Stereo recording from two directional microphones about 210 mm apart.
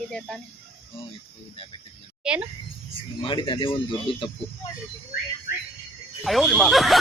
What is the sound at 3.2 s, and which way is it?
Speech, 25° left (ahead or behind).